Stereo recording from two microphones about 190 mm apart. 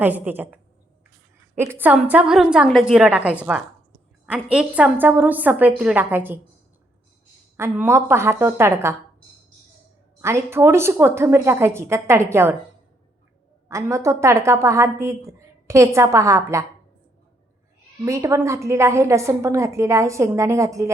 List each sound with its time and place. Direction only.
0.0 s a woman's voice: 10° right (ahead or behind)
4.5 s a woman's voice: 5° right (ahead or behind)
7.5 s a woman's voice: 10° right (ahead or behind)
10.2 s a woman's voice: 15° right (ahead or behind)
13.7 s a woman's voice: 15° right (ahead or behind)
18.0 s a woman's voice: 15° right (ahead or behind)